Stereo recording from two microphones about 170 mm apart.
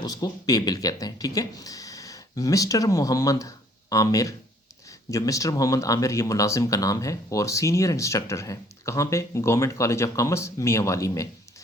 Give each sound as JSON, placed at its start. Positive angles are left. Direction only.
{"t": 0.0, "sound": "speech", "side_deg": 25}